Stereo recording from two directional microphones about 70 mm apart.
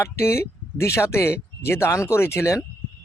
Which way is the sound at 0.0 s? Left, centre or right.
Left.